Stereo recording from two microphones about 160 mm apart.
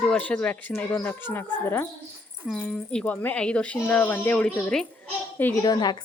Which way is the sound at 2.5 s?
Centre (ahead or behind).